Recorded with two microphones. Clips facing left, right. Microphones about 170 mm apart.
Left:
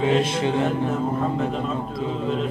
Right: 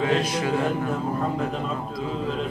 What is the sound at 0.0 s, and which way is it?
Music, 25° left (ahead or behind).